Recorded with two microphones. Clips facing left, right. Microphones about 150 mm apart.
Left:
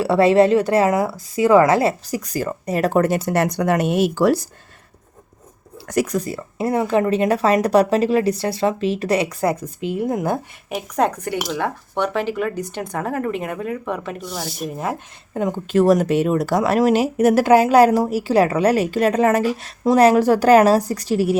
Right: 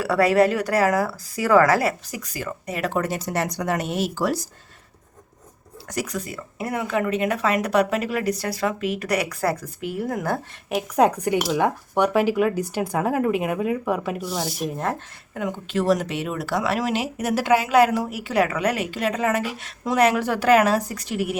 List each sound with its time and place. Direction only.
0.0 s speech: 25° left (ahead or behind); by 4.4 s 65° left (ahead or behind)
5.9 s speech: 55° left (ahead or behind)
6.1 s speech: 35° left (ahead or behind)
10.7 s speech: 5° right (ahead or behind)
15.3 s speech: 35° left (ahead or behind)